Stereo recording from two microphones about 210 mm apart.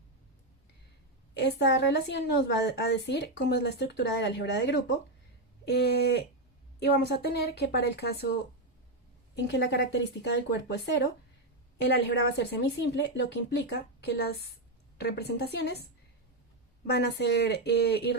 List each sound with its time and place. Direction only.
1.3 s a woman's voice: 55° left (ahead or behind)
16.9 s a woman's voice: 50° left (ahead or behind)